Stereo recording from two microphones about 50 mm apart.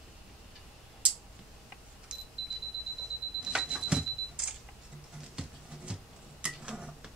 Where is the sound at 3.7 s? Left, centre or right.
Centre.